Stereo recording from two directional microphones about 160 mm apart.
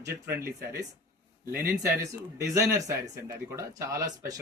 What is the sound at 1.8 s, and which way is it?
A man's voice, 20° right (ahead or behind).